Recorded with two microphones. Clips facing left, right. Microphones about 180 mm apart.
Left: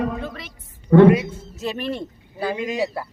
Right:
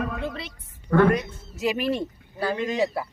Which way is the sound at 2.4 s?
10° left (ahead or behind).